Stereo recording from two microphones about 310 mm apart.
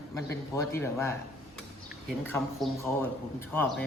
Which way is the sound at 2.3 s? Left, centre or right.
Centre.